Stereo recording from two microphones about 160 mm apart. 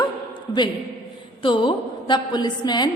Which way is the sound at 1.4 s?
30° left (ahead or behind).